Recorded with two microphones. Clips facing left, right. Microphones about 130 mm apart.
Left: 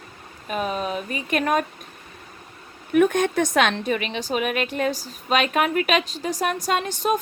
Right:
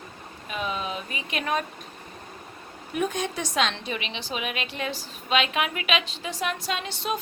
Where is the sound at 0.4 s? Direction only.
45° left (ahead or behind).